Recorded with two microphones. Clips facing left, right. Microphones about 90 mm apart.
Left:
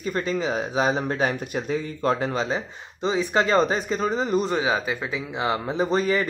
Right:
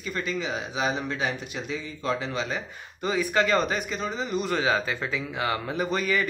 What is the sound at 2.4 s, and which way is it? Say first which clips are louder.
A man's voice: left 5 dB; 30° left (ahead or behind).